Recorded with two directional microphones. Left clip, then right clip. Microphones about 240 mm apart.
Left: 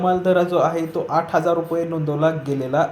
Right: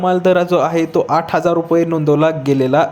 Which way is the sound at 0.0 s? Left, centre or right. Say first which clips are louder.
Right 4 dB; right.